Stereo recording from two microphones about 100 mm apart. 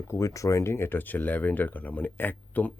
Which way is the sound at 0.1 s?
30° left (ahead or behind).